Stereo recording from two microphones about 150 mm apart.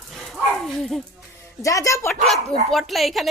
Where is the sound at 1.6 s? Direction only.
20° left (ahead or behind).